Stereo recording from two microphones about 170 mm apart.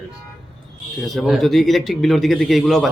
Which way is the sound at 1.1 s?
Centre (ahead or behind).